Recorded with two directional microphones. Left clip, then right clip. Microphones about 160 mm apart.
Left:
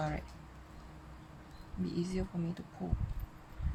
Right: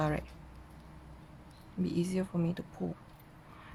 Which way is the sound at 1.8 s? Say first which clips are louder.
Right 4 dB; 45° right (ahead or behind).